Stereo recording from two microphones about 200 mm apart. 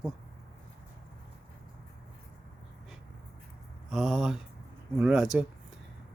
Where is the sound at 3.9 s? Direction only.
Centre (ahead or behind).